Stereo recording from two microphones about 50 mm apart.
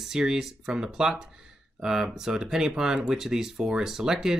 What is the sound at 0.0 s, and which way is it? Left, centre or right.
Speech, centre.